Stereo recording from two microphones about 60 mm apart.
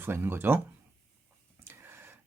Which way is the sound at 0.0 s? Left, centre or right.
Right.